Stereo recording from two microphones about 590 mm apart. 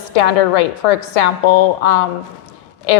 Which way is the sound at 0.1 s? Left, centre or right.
Left.